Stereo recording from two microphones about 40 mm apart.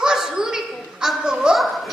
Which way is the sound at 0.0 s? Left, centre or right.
Centre.